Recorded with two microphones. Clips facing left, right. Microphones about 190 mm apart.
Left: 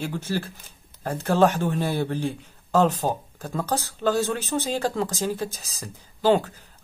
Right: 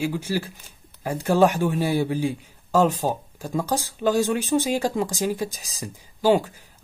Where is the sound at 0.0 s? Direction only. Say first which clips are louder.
Right 3 dB; 10° right (ahead or behind).